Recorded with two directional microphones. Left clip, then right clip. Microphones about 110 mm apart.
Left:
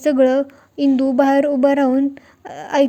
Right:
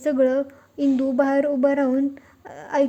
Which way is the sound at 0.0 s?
25° left (ahead or behind).